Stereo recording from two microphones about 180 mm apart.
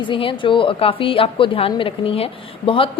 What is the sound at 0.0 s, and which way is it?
A woman's voice, 30° left (ahead or behind).